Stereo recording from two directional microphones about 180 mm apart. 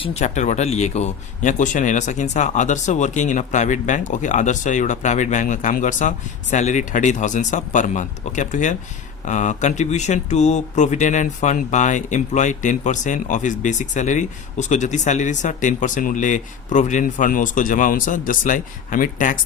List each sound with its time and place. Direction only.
0.0 s speech: 35° left (ahead or behind)